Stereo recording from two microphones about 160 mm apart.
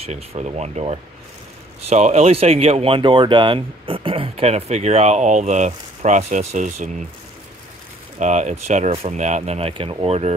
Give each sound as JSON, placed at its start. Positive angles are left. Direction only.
{"t": 0.0, "sound": "speech", "side_deg": -40}
{"t": 8.2, "sound": "speech", "side_deg": -50}